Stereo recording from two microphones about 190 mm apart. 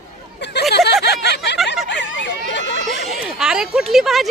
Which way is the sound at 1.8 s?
70° left (ahead or behind).